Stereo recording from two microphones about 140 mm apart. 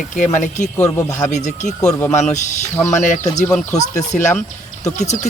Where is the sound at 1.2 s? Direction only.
60° left (ahead or behind).